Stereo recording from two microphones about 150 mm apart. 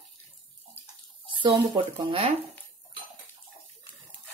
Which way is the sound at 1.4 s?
30° right (ahead or behind).